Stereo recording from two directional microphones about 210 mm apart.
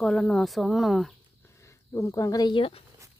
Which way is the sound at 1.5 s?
15° left (ahead or behind).